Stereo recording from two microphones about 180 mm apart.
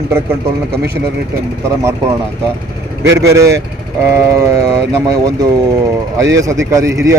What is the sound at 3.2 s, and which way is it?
Speech, 15° right (ahead or behind).